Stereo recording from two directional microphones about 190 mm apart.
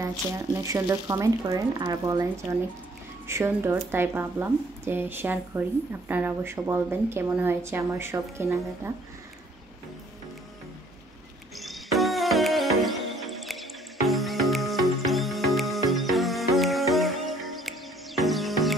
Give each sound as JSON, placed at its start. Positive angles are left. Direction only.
{"t": 0.0, "sound": "a woman's voice", "side_deg": -15}
{"t": 3.3, "sound": "a woman's voice", "side_deg": -15}
{"t": 11.5, "sound": "music", "side_deg": 0}